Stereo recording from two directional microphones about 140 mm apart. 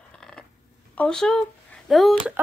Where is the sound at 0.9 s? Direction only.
5° left (ahead or behind).